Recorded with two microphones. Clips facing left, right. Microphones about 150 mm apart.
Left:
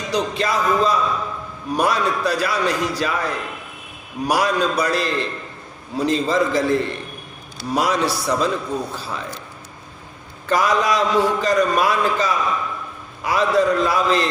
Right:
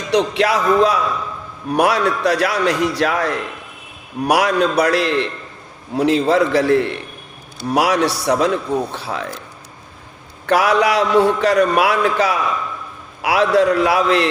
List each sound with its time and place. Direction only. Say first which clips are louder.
0.1 s a man's voice: right 6 dB; 75° right (ahead or behind)
10.4 s a man's voice: right 4 dB; 70° right (ahead or behind)